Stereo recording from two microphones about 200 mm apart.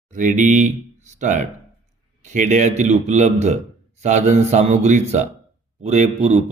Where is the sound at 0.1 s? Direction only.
40° right (ahead or behind).